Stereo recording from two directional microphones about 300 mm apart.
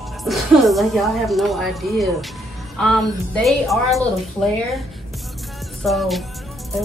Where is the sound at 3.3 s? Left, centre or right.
Centre.